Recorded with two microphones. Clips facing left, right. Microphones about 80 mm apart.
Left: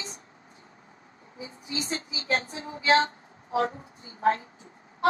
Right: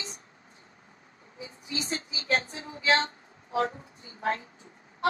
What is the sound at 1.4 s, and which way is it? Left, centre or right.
Speech, left.